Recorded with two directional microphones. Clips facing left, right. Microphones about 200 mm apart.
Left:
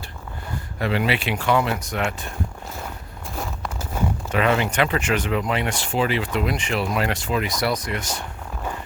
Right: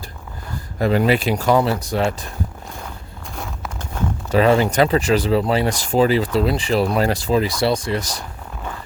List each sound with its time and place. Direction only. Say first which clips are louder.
0.8 s speech: right 6 dB; 40° right (ahead or behind)
3.3 s walk: left 1 dB; centre (ahead or behind)
4.3 s speech: right 7 dB; 35° right (ahead or behind)